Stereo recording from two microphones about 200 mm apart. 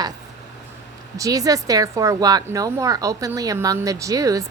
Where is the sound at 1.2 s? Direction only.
15° right (ahead or behind).